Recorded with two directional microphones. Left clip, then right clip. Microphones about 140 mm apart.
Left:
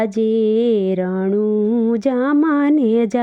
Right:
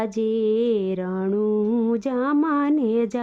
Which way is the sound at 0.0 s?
30° left (ahead or behind).